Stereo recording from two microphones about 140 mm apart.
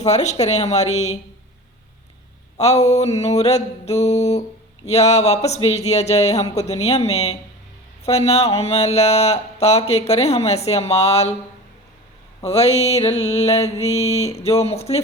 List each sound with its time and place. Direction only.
0.0 s speech: 55° left (ahead or behind)
2.6 s speech: 50° left (ahead or behind)
12.4 s speech: 45° left (ahead or behind)